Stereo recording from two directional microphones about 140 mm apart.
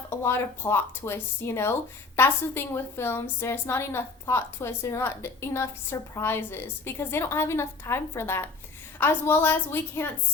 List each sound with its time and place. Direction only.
0.2 s a woman's voice: 20° left (ahead or behind)